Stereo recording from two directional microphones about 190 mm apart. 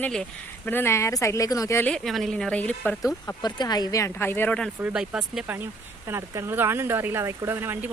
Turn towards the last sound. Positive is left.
turn(degrees=-10)  # may be behind; listen again after turning